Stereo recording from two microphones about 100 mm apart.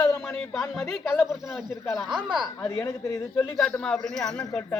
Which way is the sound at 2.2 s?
50° right (ahead or behind).